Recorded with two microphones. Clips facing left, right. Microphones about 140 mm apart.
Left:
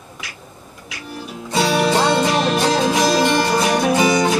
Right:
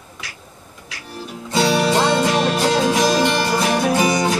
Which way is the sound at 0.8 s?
5° left (ahead or behind).